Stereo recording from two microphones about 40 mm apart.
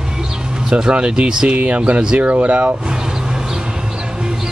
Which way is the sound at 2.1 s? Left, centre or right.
Right.